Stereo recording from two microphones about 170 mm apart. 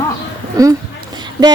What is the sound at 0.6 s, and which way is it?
Speech, 20° right (ahead or behind).